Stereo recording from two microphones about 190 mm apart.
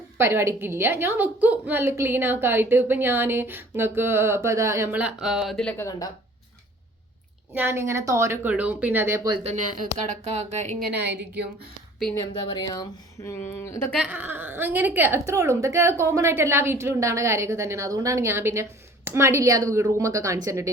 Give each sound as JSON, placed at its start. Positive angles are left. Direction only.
{"t": 0.2, "sound": "a woman's voice", "side_deg": -15}
{"t": 7.5, "sound": "a woman's voice", "side_deg": -10}
{"t": 9.4, "sound": "speech", "side_deg": -35}
{"t": 11.0, "sound": "a woman's voice", "side_deg": -60}
{"t": 12.3, "sound": "a woman's voice", "side_deg": 25}
{"t": 13.9, "sound": "a woman's voice", "side_deg": -5}